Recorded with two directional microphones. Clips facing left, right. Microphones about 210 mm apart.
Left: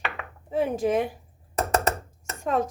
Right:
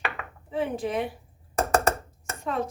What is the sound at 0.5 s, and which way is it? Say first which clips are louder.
Speech: left 4 dB; 45° left (ahead or behind).